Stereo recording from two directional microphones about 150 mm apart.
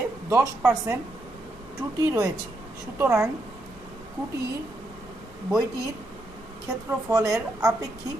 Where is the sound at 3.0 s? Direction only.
20° right (ahead or behind).